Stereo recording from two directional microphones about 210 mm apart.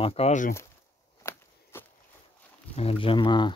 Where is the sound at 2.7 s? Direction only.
30° left (ahead or behind).